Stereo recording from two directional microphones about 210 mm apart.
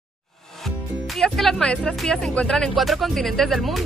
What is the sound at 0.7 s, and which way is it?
Speech, centre (ahead or behind).